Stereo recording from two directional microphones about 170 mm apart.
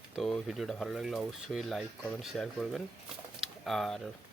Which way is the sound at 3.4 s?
Centre (ahead or behind).